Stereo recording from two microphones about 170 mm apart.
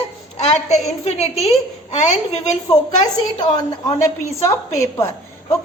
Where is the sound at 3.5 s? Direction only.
30° left (ahead or behind).